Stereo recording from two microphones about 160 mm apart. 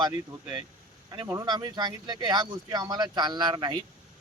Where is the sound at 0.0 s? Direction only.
25° right (ahead or behind).